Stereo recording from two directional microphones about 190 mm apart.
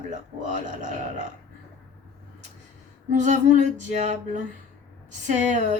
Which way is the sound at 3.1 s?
40° right (ahead or behind).